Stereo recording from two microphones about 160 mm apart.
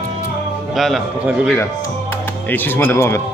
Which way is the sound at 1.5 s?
15° left (ahead or behind).